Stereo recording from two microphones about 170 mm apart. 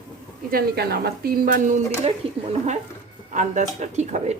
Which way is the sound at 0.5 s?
65° right (ahead or behind).